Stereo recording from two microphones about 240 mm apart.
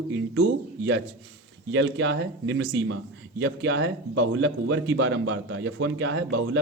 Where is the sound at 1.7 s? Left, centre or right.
Right.